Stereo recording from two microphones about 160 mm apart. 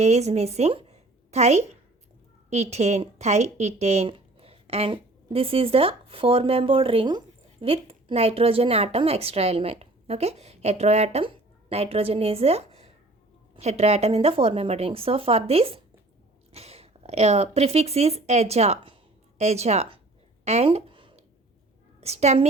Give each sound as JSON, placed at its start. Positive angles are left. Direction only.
{"t": 0.0, "sound": "a woman's voice", "side_deg": -45}
{"t": 20.4, "sound": "a sound", "side_deg": -40}
{"t": 22.0, "sound": "a woman's voice", "side_deg": -40}